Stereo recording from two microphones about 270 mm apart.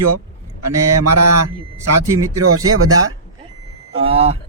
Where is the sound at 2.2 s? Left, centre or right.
Right.